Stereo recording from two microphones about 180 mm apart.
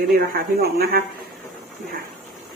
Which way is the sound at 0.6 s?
60° right (ahead or behind).